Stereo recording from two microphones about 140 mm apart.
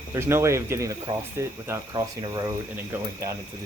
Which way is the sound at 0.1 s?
20° right (ahead or behind).